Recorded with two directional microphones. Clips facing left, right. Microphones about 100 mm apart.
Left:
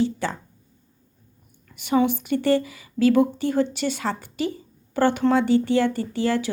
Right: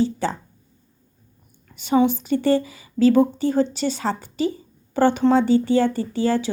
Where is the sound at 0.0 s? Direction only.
30° right (ahead or behind).